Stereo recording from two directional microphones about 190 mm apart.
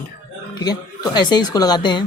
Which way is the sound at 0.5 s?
20° left (ahead or behind).